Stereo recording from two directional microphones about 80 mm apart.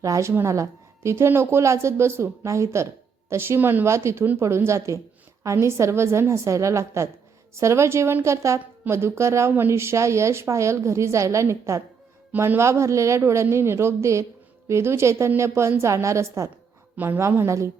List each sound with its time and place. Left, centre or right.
0.0 s speech: right